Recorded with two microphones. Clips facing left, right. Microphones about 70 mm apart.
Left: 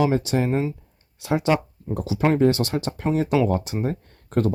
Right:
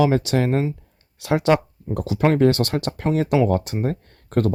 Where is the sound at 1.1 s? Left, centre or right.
Right.